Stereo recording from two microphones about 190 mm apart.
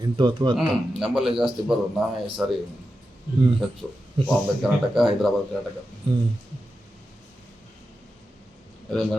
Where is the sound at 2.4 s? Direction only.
5° right (ahead or behind).